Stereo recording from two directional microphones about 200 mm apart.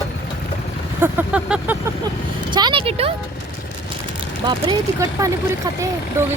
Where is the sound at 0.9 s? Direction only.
10° right (ahead or behind).